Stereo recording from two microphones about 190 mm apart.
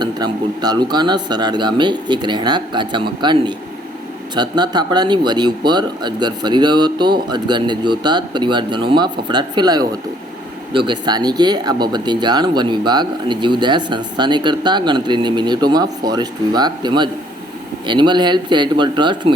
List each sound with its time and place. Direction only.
0.0 s speech: 20° right (ahead or behind)